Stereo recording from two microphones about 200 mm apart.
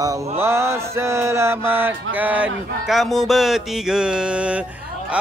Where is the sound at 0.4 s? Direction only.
15° right (ahead or behind).